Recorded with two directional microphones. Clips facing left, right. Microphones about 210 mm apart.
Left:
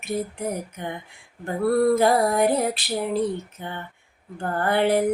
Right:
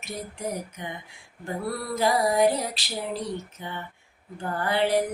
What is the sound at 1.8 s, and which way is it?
Female singing, 55° left (ahead or behind).